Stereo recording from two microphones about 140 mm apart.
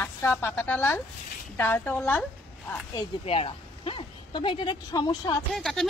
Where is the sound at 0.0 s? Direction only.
15° left (ahead or behind).